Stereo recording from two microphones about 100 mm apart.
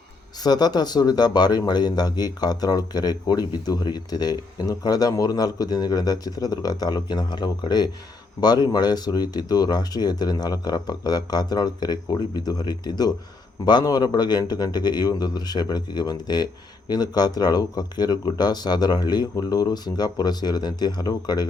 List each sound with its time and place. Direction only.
0.4 s speech: 40° left (ahead or behind)